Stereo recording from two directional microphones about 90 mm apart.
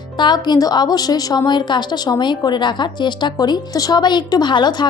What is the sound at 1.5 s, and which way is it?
A woman's voice, 55° left (ahead or behind).